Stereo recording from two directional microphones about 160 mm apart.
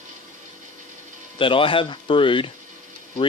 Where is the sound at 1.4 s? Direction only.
35° left (ahead or behind).